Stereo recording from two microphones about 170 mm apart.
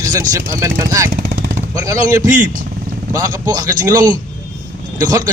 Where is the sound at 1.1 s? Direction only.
60° right (ahead or behind).